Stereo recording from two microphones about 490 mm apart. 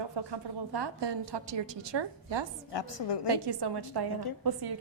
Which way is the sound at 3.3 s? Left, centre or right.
Right.